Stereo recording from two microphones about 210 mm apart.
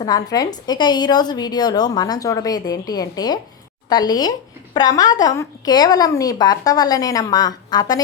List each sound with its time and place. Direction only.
0.0 s a woman's voice: 20° left (ahead or behind)